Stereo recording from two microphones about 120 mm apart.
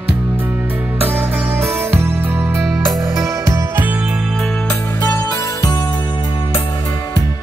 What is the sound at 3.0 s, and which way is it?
Music, 25° right (ahead or behind).